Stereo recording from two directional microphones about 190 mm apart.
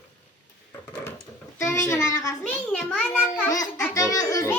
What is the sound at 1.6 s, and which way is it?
Speech, 15° left (ahead or behind).